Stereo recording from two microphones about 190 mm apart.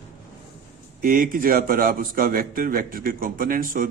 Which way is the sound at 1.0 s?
50° right (ahead or behind).